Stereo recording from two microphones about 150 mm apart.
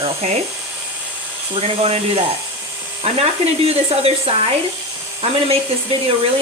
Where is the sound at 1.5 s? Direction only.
40° right (ahead or behind).